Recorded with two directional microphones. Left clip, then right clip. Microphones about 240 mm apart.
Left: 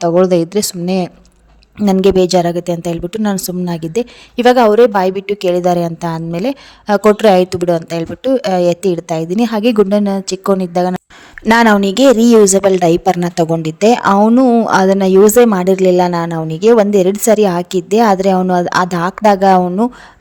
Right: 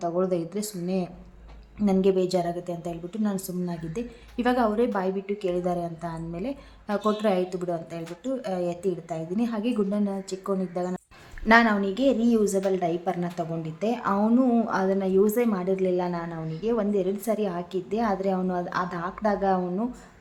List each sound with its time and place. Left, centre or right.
0.0 s a woman's voice: left